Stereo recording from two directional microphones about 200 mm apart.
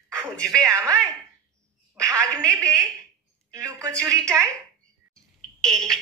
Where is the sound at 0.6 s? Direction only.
15° right (ahead or behind).